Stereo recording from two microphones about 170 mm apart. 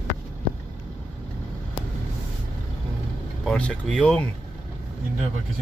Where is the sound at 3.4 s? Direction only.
5° left (ahead or behind).